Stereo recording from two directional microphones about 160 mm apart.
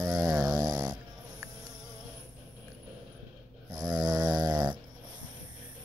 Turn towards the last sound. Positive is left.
turn(degrees=-25)  # may be behind; listen again after turning